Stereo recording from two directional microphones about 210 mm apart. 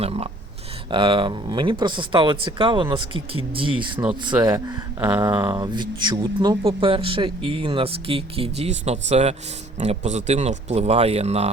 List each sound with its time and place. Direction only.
0.0 s speech: 30° right (ahead or behind)